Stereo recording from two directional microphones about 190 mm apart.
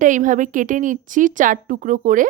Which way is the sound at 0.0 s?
40° right (ahead or behind).